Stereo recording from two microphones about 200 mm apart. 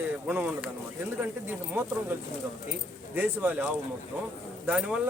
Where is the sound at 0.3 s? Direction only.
5° right (ahead or behind).